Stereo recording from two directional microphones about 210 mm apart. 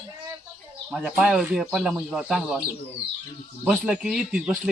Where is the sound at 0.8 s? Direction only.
5° right (ahead or behind).